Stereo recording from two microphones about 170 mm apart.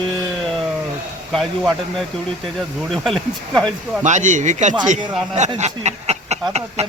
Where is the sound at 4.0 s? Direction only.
45° right (ahead or behind).